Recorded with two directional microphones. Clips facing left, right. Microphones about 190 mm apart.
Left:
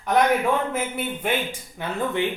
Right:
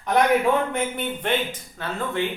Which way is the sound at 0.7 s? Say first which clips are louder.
Right 1 dB; 5° left (ahead or behind).